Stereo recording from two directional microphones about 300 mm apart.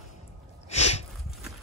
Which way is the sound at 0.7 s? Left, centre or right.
Left.